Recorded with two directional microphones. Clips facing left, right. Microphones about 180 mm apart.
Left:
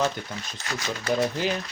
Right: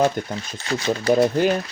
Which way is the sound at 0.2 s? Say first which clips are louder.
Right 9 dB; 50° right (ahead or behind).